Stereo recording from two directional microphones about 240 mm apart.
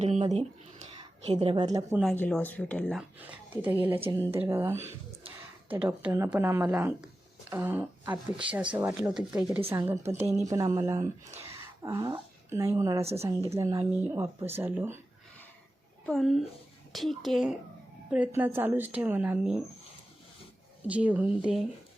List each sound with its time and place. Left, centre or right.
0.0 s a woman's voice: right
2.1 s speech: centre
3.2 s speech: centre
8.1 s speech: right
8.7 s speech: centre
16.0 s speech: centre
20.8 s speech: centre